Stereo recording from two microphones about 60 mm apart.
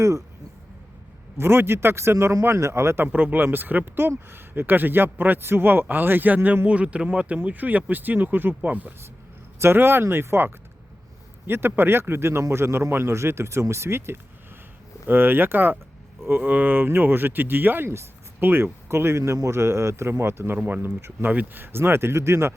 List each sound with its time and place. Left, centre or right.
1.4 s a man's voice: right
3.0 s a man's voice: right
9.6 s a man's voice: right
20.6 s speech: right
20.8 s a man's voice: right